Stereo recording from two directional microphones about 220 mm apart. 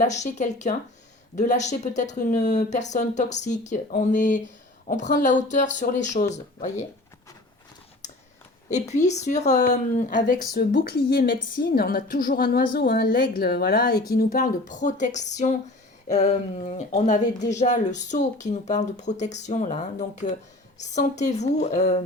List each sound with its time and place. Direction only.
0.0 s speech: 35° left (ahead or behind)
8.7 s speech: 30° left (ahead or behind)